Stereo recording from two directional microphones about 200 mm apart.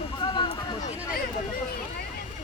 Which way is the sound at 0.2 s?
25° left (ahead or behind).